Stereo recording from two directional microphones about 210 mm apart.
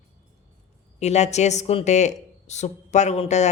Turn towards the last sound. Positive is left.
turn(degrees=30)  # may be behind; listen again after turning